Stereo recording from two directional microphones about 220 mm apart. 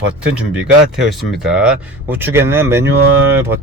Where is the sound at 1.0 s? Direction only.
Centre (ahead or behind).